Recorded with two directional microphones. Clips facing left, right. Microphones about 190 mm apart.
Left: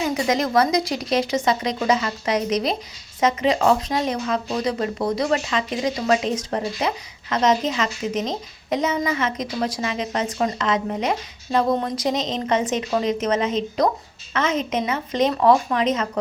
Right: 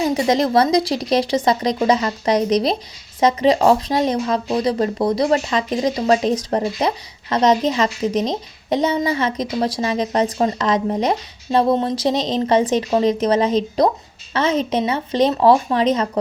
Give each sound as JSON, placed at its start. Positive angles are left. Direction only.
{"t": 0.0, "sound": "speech", "side_deg": -35}